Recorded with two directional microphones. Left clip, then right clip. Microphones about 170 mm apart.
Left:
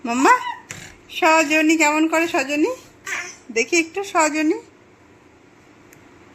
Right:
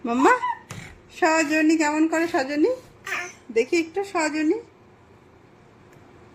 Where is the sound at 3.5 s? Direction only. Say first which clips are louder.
Left 3 dB; 5° left (ahead or behind).